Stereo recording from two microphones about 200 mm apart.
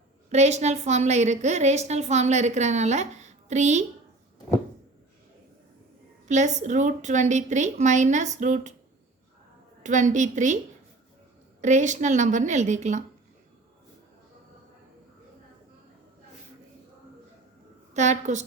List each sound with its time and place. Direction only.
0.3 s a woman's voice: 35° right (ahead or behind)
6.2 s a woman's voice: 35° right (ahead or behind)
9.8 s a woman's voice: 35° right (ahead or behind)
11.6 s a woman's voice: 35° right (ahead or behind)
17.9 s a woman's voice: 35° right (ahead or behind)